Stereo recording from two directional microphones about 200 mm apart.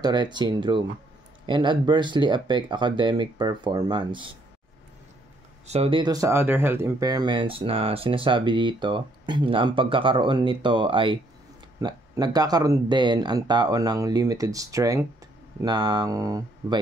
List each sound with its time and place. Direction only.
0.0 s speech: 20° right (ahead or behind)
5.7 s speech: 30° right (ahead or behind)